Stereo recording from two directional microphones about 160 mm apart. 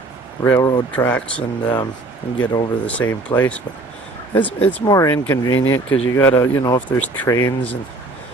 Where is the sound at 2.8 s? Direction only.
10° left (ahead or behind).